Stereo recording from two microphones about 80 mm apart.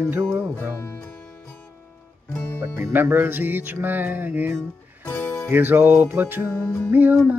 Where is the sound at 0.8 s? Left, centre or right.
Left.